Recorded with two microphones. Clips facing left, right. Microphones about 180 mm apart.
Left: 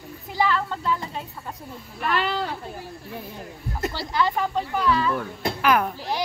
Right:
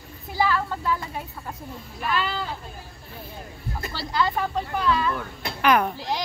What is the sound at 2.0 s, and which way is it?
Speech, 65° left (ahead or behind).